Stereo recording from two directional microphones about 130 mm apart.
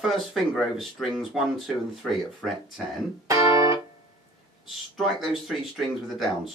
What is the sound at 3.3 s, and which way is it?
Music, 25° right (ahead or behind).